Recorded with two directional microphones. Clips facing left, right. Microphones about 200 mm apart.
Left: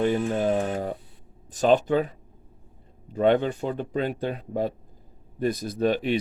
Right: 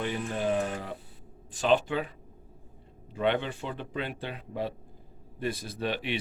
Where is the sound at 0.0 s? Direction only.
45° left (ahead or behind).